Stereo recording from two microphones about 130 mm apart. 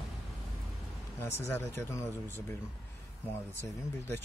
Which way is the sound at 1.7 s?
20° left (ahead or behind).